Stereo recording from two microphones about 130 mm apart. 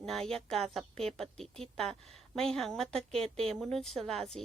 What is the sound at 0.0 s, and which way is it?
A woman's voice, 5° left (ahead or behind).